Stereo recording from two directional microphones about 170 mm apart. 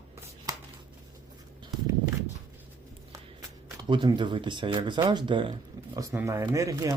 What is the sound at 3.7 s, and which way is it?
Speech, 25° right (ahead or behind).